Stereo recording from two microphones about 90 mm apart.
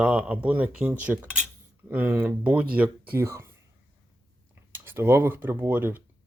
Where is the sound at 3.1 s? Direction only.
30° right (ahead or behind).